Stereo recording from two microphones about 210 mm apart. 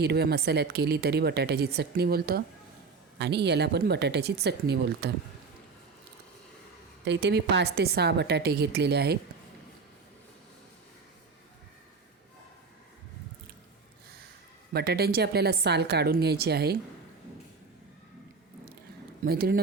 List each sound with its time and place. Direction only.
0.0 s a woman's voice: 50° right (ahead or behind)
7.0 s a woman's voice: 55° right (ahead or behind)
14.7 s a woman's voice: 50° right (ahead or behind)
19.2 s a woman's voice: 45° right (ahead or behind)